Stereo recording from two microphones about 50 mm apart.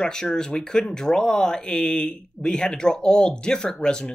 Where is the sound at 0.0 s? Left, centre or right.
Centre.